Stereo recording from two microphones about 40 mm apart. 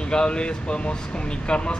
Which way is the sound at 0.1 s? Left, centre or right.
Left.